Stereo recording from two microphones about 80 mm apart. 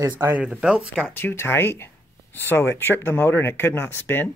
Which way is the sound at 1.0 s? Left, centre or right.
Left.